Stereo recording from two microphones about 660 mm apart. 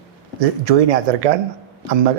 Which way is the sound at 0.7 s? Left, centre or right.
Right.